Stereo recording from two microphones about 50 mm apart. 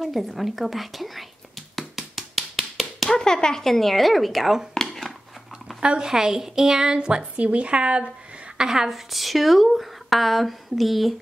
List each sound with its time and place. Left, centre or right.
0.0 s a woman's voice: centre
1.8 s tap: centre
3.1 s a woman's voice: centre
4.8 s a sound: centre
5.8 s a woman's voice: centre
8.5 s a woman's voice: centre